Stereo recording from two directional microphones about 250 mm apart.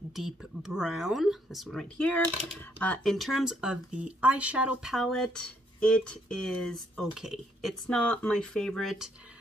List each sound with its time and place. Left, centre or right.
0.1 s speech: centre